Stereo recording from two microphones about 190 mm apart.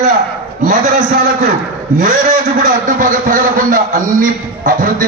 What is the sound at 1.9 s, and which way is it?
A man's voice, 45° right (ahead or behind).